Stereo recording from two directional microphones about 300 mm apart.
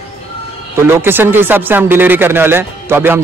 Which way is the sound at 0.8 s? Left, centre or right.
Centre.